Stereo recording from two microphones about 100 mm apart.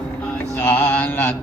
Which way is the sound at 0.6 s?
20° left (ahead or behind).